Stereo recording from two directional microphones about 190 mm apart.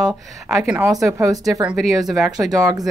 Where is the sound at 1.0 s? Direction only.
15° right (ahead or behind).